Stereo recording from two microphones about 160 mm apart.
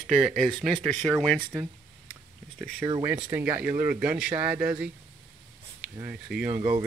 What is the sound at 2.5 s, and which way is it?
Speech, 5° right (ahead or behind).